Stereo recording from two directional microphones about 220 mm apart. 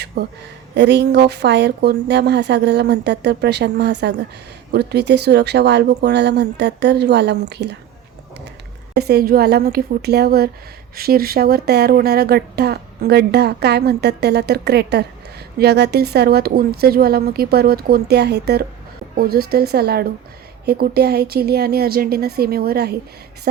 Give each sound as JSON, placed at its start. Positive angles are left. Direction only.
{"t": 0.2, "sound": "speech", "side_deg": -45}
{"t": 9.0, "sound": "speech", "side_deg": -45}